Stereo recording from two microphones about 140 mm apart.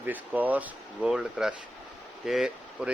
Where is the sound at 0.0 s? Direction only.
10° right (ahead or behind).